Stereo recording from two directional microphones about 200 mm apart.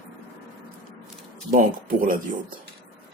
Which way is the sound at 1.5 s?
45° right (ahead or behind).